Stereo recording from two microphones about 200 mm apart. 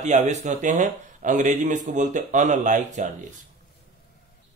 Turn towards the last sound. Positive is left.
turn(degrees=-40)  # may be behind; listen again after turning